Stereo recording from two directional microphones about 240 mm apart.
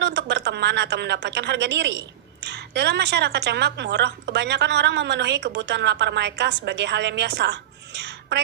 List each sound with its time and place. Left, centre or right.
0.0 s a woman's voice: right